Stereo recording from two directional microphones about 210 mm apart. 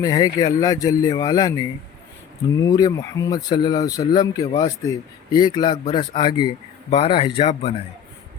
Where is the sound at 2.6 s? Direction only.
15° left (ahead or behind).